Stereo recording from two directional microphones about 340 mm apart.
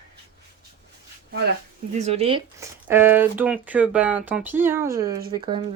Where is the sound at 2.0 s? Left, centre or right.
Centre.